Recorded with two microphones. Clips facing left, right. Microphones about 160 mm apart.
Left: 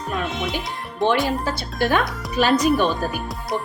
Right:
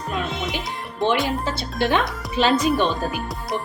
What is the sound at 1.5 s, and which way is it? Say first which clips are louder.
Speech: even; 20° right (ahead or behind).